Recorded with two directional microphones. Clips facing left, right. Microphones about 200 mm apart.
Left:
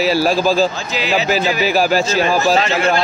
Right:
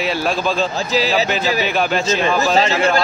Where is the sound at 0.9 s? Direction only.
35° right (ahead or behind).